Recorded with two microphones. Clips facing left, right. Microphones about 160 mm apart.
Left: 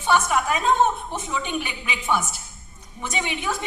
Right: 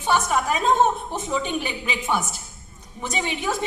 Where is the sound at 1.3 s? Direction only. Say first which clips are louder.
Right 3 dB; 35° right (ahead or behind).